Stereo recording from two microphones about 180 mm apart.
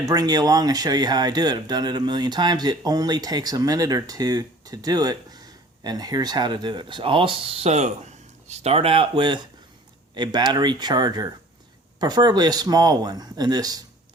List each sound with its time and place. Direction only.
0.0 s speech: 20° right (ahead or behind)